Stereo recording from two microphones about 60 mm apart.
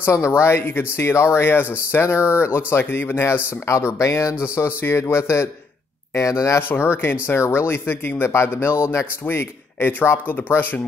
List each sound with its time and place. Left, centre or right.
0.1 s speech: left
3.6 s speech: left
6.1 s speech: left
6.7 s speech: left